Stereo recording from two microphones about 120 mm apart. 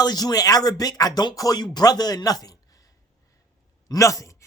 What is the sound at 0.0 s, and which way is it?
Speech, 35° left (ahead or behind).